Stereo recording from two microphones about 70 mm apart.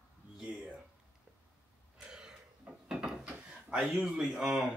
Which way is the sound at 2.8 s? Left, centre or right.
Centre.